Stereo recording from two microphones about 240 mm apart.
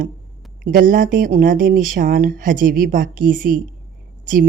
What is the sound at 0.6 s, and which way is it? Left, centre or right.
A woman's voice, right.